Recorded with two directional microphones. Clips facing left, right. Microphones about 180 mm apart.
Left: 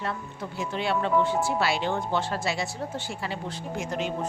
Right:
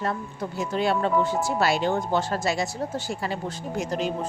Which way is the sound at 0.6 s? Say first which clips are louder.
Right 3 dB; 40° right (ahead or behind).